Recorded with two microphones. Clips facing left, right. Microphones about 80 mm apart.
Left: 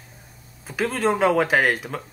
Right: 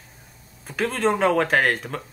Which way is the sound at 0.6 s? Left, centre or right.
Centre.